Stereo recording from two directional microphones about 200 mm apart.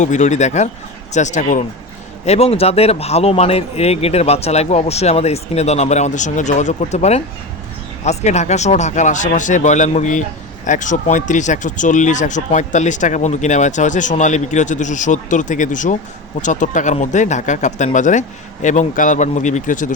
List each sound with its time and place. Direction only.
0.0 s speech: 35° left (ahead or behind)